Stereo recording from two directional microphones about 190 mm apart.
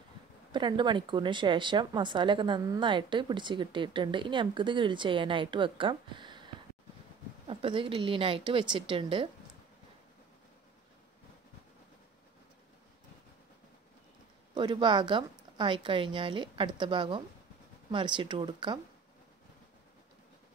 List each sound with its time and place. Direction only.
0.5 s speech: 25° right (ahead or behind)
14.5 s speech: 25° right (ahead or behind)